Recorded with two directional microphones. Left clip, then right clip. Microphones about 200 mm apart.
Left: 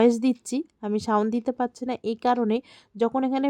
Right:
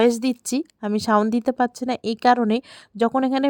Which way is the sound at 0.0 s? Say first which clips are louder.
Right 2 dB; 35° right (ahead or behind).